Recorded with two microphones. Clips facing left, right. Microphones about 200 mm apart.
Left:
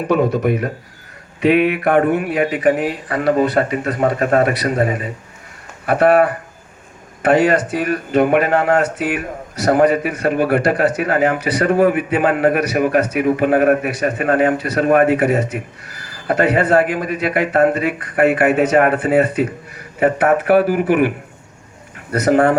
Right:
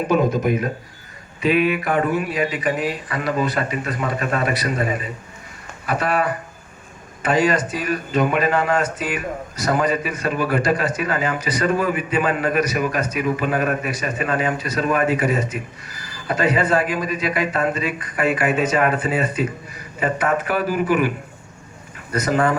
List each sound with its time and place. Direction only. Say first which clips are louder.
0.1 s speech: left 4 dB; 65° left (ahead or behind)
22.1 s speech: left 6 dB; 65° left (ahead or behind)